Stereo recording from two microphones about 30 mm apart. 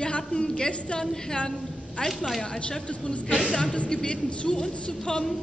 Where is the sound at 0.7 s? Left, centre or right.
Left.